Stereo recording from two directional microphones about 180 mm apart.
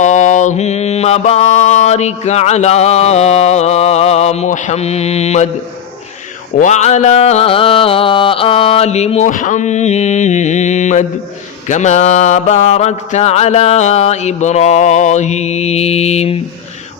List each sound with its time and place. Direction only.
0.0 s mantra: 40° left (ahead or behind)
6.6 s mantra: 40° left (ahead or behind)